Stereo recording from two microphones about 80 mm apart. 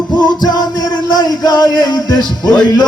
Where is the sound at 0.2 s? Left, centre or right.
Left.